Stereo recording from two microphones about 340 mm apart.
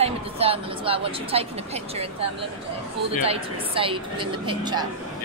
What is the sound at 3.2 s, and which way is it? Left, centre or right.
Speech, centre.